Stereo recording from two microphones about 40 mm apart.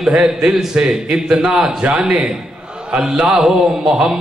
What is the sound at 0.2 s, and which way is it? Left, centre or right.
A man's voice, right.